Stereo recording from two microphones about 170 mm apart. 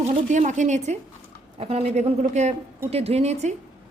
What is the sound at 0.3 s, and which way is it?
A woman's voice, 45° right (ahead or behind).